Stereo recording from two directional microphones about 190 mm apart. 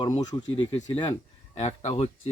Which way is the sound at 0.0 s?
20° left (ahead or behind).